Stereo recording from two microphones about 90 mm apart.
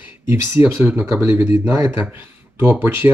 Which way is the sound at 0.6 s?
15° right (ahead or behind).